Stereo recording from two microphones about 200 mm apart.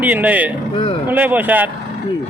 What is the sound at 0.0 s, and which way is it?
Speech, 10° right (ahead or behind).